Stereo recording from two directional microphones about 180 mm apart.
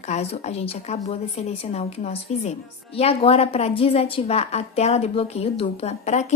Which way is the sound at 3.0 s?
35° left (ahead or behind).